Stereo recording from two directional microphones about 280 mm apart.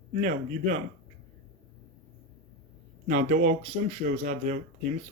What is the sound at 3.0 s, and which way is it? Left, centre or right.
Speech, right.